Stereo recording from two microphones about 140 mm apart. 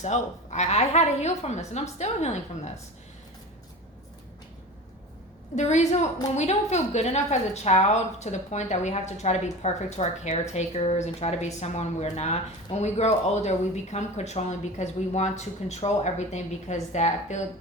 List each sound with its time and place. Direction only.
0.0 s a woman's voice: 55° left (ahead or behind)
5.5 s a woman's voice: 55° left (ahead or behind)